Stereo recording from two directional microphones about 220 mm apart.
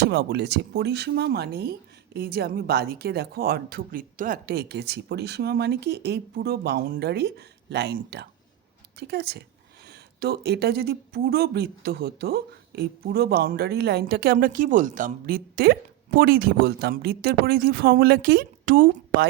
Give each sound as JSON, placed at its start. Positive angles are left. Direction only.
{"t": 0.0, "sound": "speech", "side_deg": -50}